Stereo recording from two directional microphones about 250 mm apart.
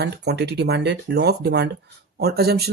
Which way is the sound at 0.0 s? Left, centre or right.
Right.